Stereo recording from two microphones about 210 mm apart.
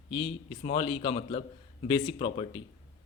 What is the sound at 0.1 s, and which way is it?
Speech, 25° left (ahead or behind).